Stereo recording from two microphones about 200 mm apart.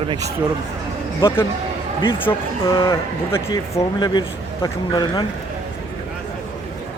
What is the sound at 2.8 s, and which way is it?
Speech, 15° left (ahead or behind).